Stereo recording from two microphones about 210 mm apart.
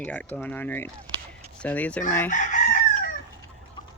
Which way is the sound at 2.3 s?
35° left (ahead or behind).